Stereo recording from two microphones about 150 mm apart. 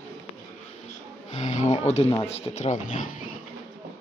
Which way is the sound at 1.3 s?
50° left (ahead or behind).